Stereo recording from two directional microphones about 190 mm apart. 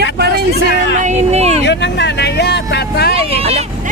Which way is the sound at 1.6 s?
65° left (ahead or behind).